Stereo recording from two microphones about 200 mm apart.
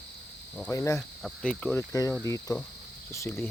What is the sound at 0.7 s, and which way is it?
Speech, 15° left (ahead or behind).